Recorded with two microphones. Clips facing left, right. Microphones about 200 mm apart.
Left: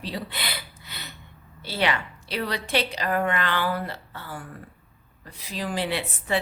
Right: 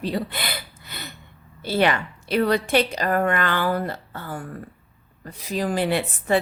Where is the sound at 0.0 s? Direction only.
50° right (ahead or behind).